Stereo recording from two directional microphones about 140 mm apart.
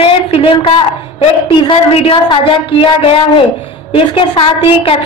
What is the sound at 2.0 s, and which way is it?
Speech, 40° left (ahead or behind).